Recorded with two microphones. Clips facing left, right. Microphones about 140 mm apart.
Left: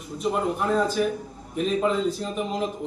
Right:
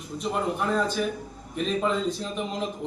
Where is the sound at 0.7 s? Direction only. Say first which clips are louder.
Left 3 dB; 5° left (ahead or behind).